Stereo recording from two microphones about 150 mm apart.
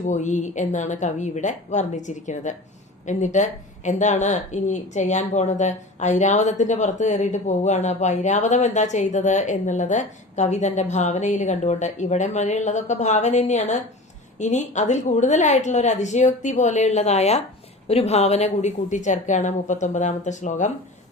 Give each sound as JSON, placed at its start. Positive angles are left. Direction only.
{"t": 0.0, "sound": "a woman's voice", "side_deg": 55}